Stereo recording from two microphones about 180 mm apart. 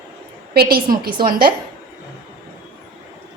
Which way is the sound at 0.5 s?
55° right (ahead or behind).